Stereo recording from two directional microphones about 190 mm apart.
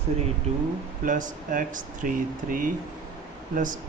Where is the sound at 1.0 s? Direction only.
45° right (ahead or behind).